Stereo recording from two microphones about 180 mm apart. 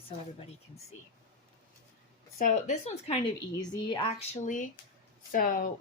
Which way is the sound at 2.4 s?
40° left (ahead or behind).